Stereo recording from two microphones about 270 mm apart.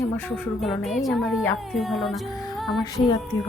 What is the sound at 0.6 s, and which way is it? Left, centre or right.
Music, centre.